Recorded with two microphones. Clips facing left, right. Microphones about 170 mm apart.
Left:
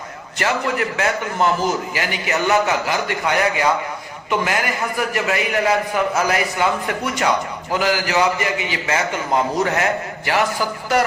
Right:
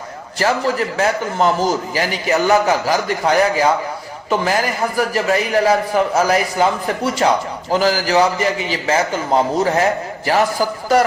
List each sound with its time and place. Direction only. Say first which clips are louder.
0.3 s a man's voice: right 3 dB; 35° right (ahead or behind)
4.9 s a man's voice: right 5 dB; 35° right (ahead or behind)